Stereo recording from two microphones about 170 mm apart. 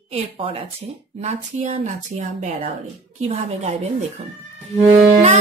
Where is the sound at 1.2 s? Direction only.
40° right (ahead or behind).